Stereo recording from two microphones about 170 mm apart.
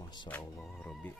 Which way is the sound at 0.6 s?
Centre (ahead or behind).